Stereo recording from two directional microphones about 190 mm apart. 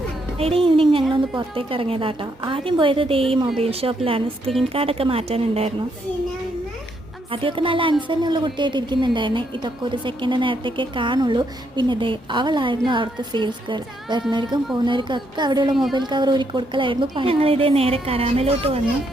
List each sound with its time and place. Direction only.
0.3 s a woman's voice: 30° right (ahead or behind)
7.3 s a woman's voice: 25° right (ahead or behind)